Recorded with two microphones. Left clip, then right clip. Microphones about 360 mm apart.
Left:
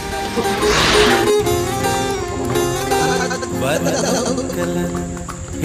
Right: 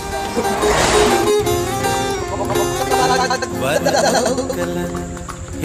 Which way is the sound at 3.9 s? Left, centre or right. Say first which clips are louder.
Right 4 dB; right.